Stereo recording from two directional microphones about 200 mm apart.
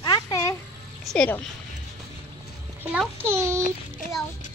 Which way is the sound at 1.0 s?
5° left (ahead or behind).